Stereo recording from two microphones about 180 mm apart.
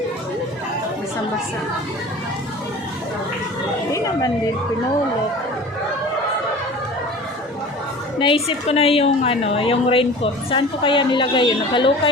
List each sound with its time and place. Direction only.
3.9 s a woman's voice: 20° left (ahead or behind)
8.2 s a woman's voice: 30° left (ahead or behind)